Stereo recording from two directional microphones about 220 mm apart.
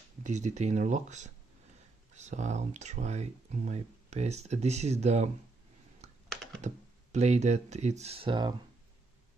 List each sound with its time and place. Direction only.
0.2 s speech: 30° right (ahead or behind)
6.2 s computer keyboard: centre (ahead or behind)
6.6 s speech: 30° right (ahead or behind)